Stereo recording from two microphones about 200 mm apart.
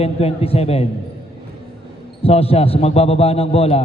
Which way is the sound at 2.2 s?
30° left (ahead or behind).